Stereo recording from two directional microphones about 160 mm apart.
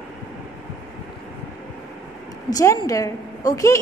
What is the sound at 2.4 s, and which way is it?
A woman's voice, 25° left (ahead or behind).